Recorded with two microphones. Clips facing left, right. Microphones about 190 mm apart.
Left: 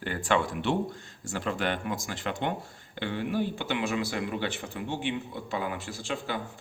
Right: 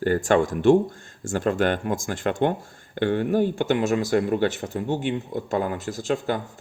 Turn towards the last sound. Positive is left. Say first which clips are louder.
# right 9 dB
turn(degrees=-45)  # may be behind; listen again after turning